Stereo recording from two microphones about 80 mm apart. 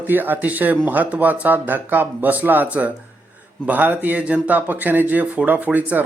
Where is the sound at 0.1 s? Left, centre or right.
Right.